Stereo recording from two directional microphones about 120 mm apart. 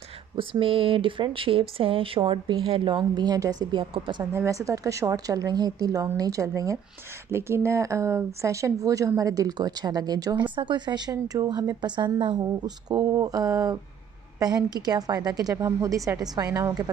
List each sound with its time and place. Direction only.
0.4 s a woman's voice: 50° right (ahead or behind); by 16.9 s 30° right (ahead or behind)